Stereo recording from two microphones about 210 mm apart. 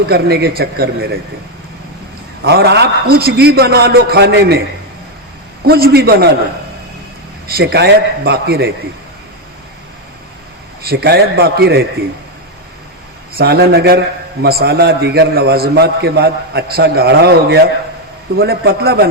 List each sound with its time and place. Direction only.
0.1 s a man's voice: 50° right (ahead or behind)
2.4 s a man's voice: 50° right (ahead or behind)
5.6 s a man's voice: 50° right (ahead or behind)
7.4 s a man's voice: 50° right (ahead or behind)
10.8 s a man's voice: 50° right (ahead or behind)
13.3 s a man's voice: 50° right (ahead or behind)